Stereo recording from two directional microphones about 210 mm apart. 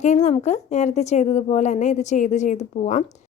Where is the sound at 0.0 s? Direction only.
35° left (ahead or behind).